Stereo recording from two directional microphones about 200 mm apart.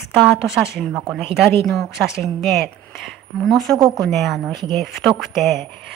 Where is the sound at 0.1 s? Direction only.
Centre (ahead or behind).